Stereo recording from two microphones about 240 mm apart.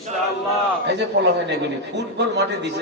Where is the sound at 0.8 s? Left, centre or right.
Right.